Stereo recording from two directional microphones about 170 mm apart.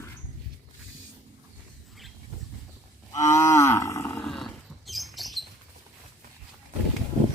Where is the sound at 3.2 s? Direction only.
15° left (ahead or behind).